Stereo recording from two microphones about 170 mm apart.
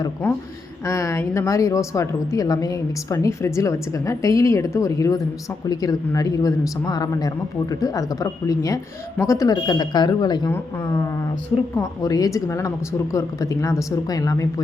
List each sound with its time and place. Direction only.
0.9 s a woman's voice: 15° left (ahead or behind)